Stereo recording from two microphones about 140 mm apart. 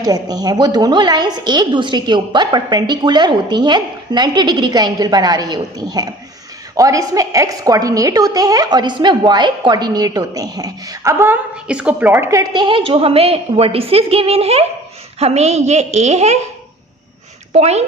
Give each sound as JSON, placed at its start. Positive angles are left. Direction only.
{"t": 0.0, "sound": "a woman's voice", "side_deg": -25}
{"t": 11.7, "sound": "a woman's voice", "side_deg": -10}
{"t": 17.5, "sound": "a woman's voice", "side_deg": -50}